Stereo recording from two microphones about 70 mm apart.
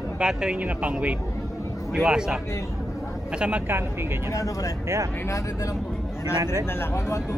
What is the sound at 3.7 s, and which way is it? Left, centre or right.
Speech, right.